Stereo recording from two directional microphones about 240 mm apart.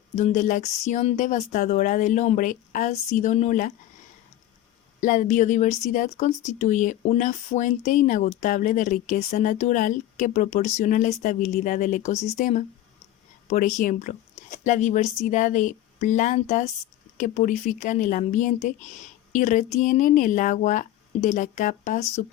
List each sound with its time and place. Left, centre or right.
0.2 s speech: left
4.9 s speech: left